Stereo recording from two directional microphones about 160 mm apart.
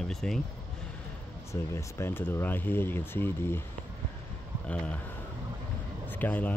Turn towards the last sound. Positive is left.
turn(degrees=10)  # may be behind; listen again after turning